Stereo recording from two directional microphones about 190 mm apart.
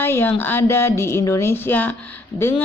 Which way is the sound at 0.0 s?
10° left (ahead or behind).